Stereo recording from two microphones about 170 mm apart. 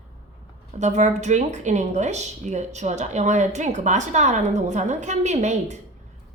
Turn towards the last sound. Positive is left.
turn(degrees=-45)  # may be behind; listen again after turning